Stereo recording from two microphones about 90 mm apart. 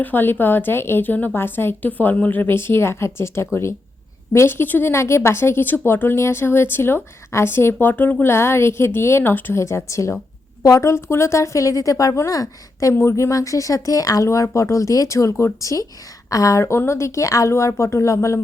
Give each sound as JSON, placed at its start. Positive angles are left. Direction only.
{"t": 0.0, "sound": "speech", "side_deg": 20}